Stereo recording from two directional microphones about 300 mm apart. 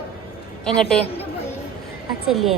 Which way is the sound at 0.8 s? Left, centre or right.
Centre.